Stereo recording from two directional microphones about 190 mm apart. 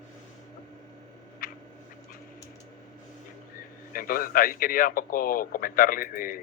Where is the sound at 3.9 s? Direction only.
50° left (ahead or behind).